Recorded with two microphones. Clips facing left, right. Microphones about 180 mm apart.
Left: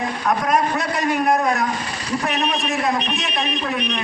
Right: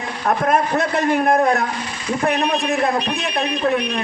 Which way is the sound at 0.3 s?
50° right (ahead or behind).